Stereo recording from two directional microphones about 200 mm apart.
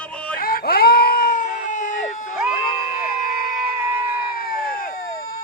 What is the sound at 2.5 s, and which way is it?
Crowd, 45° left (ahead or behind).